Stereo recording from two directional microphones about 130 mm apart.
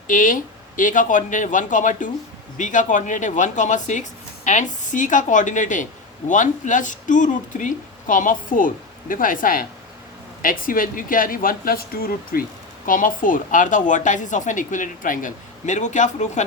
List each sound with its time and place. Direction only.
0.1 s a woman's voice: 90° left; by 16.4 s 65° left (ahead or behind)